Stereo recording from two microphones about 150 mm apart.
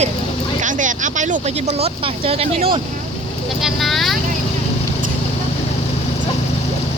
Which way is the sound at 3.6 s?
Centre (ahead or behind).